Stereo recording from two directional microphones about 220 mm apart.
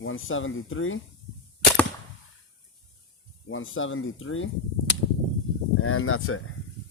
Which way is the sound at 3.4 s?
65° left (ahead or behind).